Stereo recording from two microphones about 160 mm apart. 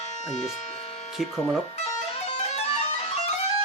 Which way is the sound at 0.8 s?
40° left (ahead or behind).